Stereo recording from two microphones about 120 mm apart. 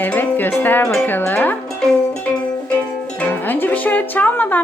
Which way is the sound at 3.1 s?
15° left (ahead or behind).